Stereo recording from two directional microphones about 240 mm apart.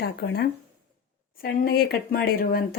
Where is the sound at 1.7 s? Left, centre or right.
Left.